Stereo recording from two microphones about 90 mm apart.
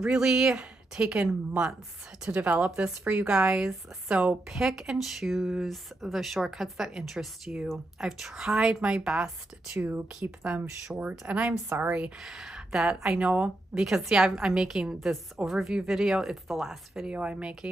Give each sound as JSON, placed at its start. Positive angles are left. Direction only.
{"t": 0.0, "sound": "speech", "side_deg": -10}
{"t": 9.8, "sound": "speech", "side_deg": -20}
{"t": 12.2, "sound": "speech", "side_deg": -5}
{"t": 13.8, "sound": "speech", "side_deg": -5}